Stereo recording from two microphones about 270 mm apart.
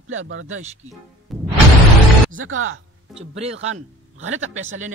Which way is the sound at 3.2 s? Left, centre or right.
Right.